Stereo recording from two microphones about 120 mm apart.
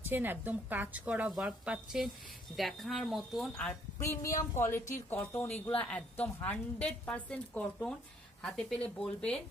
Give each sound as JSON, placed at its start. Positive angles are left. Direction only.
{"t": 0.0, "sound": "a woman's voice", "side_deg": -15}
{"t": 4.0, "sound": "a woman's voice", "side_deg": 25}